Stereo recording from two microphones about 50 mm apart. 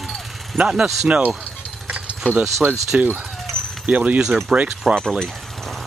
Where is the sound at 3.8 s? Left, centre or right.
Right.